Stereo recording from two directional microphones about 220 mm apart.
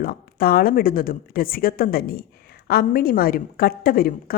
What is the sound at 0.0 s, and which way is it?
A woman's voice, 45° left (ahead or behind).